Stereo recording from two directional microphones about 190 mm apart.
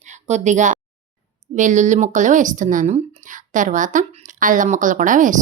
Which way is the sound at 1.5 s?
40° right (ahead or behind).